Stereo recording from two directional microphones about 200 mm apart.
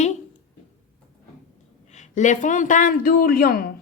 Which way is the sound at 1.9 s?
35° left (ahead or behind).